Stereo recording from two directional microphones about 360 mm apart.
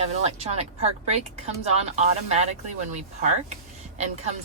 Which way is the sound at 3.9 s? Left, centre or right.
Centre.